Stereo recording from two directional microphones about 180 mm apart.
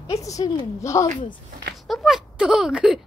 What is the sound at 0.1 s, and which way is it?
A woman's voice, 20° left (ahead or behind).